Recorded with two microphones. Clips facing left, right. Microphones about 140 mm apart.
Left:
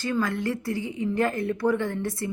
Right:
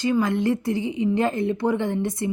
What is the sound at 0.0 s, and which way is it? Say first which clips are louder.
A woman's voice: right 5 dB; 20° right (ahead or behind).